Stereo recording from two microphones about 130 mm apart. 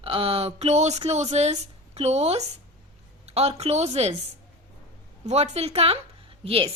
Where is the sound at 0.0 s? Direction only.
50° right (ahead or behind).